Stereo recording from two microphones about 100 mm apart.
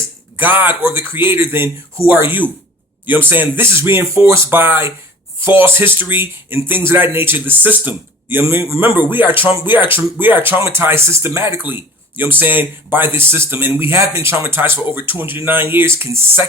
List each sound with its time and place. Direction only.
0.3 s speech: 20° right (ahead or behind)